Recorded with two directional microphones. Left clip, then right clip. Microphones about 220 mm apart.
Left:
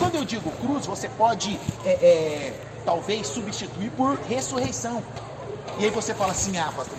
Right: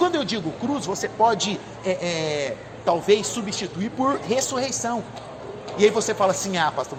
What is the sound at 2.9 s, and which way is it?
A man's voice, 55° right (ahead or behind).